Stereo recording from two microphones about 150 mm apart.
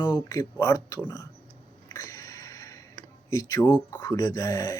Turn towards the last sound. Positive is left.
turn(degrees=20)  # may be behind; listen again after turning